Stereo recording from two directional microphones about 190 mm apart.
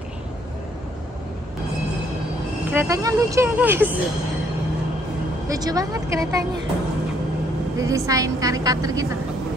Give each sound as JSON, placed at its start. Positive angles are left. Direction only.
{"t": 2.6, "sound": "speech", "side_deg": -10}
{"t": 5.5, "sound": "a woman's voice", "side_deg": -20}
{"t": 7.7, "sound": "speech", "side_deg": -15}